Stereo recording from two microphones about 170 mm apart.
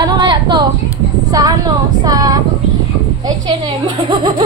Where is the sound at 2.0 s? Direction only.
20° right (ahead or behind).